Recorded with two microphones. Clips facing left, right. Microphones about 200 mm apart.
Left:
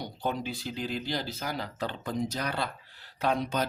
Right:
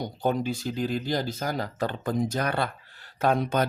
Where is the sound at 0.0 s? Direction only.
45° right (ahead or behind).